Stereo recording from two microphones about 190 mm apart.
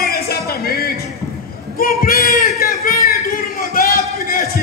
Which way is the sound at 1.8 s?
50° left (ahead or behind).